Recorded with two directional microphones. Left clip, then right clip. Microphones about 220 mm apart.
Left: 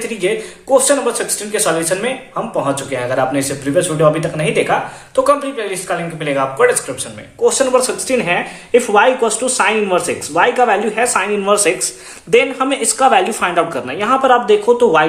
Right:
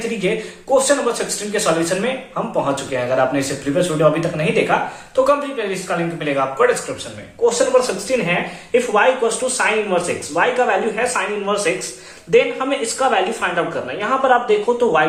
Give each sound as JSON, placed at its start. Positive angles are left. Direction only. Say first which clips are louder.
{"t": 0.2, "sound": "speech", "louder": "left 5 dB", "side_deg": 35}
{"t": 7.4, "sound": "speech", "louder": "left 2 dB", "side_deg": 50}